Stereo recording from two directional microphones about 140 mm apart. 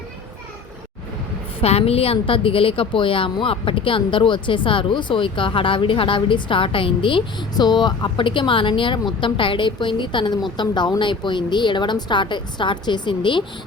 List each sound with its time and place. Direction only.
1.6 s a woman's voice: 45° left (ahead or behind)